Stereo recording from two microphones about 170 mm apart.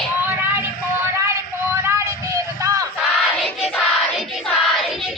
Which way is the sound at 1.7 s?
15° right (ahead or behind).